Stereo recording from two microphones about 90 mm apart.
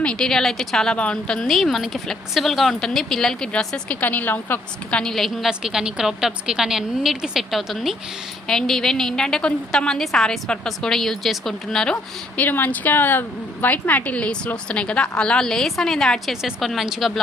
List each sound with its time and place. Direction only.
0.0 s speech: 10° left (ahead or behind)
4.0 s a woman's voice: 20° left (ahead or behind)
4.9 s speech: 5° left (ahead or behind)
12.4 s a woman's voice: 20° left (ahead or behind); by 17.1 s centre (ahead or behind)